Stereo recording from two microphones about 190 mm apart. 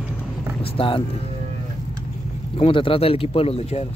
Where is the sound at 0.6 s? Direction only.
30° left (ahead or behind).